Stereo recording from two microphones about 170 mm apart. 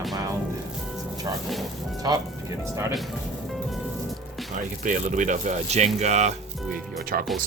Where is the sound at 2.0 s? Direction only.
20° right (ahead or behind).